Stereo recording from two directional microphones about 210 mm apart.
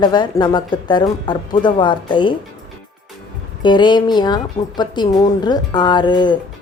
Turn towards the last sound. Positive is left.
turn(degrees=20)  # may be behind; listen again after turning